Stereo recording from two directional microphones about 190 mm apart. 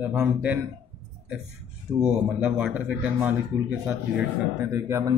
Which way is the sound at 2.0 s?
5° right (ahead or behind).